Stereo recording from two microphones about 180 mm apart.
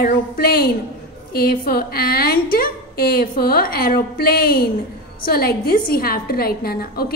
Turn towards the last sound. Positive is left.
turn(degrees=55)  # may be behind; listen again after turning